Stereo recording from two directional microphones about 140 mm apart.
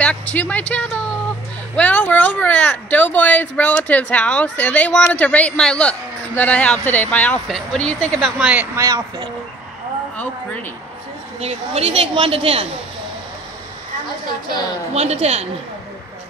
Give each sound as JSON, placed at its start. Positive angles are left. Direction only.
{"t": 0.0, "sound": "speech", "side_deg": 10}
{"t": 8.4, "sound": "speech", "side_deg": -10}
{"t": 8.7, "sound": "speech", "side_deg": -25}
{"t": 11.3, "sound": "speech", "side_deg": -50}
{"t": 15.0, "sound": "speech", "side_deg": -50}